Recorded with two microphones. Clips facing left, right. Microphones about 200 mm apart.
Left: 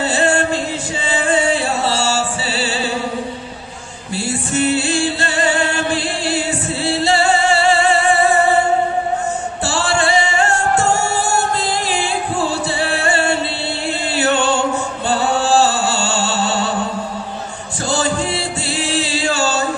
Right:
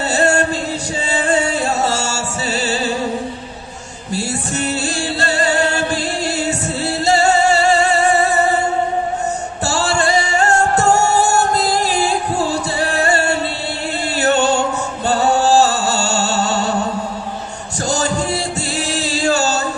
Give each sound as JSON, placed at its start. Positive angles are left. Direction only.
{"t": 0.1, "sound": "music", "side_deg": -40}
{"t": 4.1, "sound": "music", "side_deg": -40}
{"t": 9.7, "sound": "music", "side_deg": -40}
{"t": 17.8, "sound": "music", "side_deg": -40}